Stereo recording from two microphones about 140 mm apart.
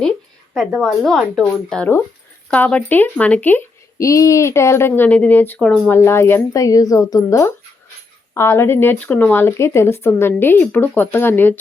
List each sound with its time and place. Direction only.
0.5 s speech: centre (ahead or behind)
5.9 s speech: 15° left (ahead or behind)